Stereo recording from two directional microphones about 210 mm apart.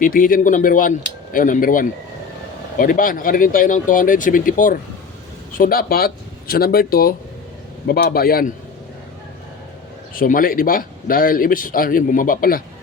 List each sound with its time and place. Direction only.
0.0 s a man's voice: 40° left (ahead or behind)
10.2 s a man's voice: 40° left (ahead or behind)